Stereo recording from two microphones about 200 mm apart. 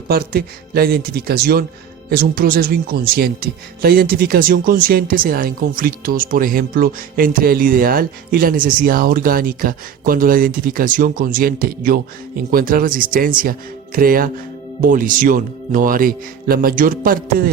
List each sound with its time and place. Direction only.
0.1 s speech: 50° right (ahead or behind)